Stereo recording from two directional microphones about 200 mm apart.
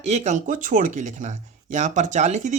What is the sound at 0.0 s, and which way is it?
Speech, 35° right (ahead or behind).